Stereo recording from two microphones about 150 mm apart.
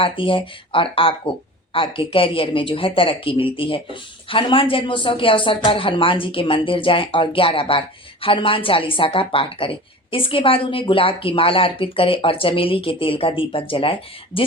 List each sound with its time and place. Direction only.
0.0 s speech: 35° left (ahead or behind)